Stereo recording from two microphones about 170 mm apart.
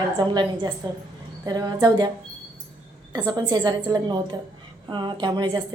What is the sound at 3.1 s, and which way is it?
A woman's voice, 25° right (ahead or behind).